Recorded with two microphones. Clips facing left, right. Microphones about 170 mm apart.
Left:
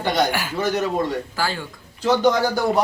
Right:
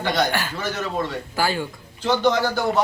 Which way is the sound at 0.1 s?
20° left (ahead or behind).